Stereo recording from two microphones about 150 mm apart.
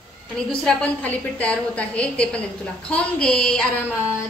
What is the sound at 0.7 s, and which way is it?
A woman's voice, 10° left (ahead or behind).